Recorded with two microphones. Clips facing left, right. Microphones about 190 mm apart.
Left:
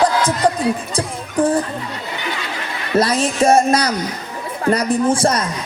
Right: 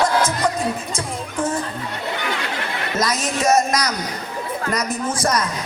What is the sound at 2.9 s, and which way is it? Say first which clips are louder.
A man's voice: left 7 dB; 30° left (ahead or behind).